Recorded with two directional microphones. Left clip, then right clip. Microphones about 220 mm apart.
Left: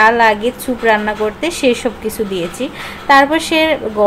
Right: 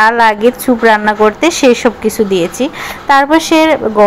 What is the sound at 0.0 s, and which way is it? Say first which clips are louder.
A woman's voice: right 3 dB; 15° right (ahead or behind).